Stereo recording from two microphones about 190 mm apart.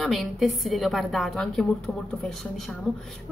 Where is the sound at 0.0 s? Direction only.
Centre (ahead or behind).